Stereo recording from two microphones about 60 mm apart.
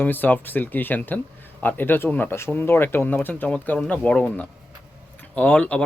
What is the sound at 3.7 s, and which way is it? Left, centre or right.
Speech, centre.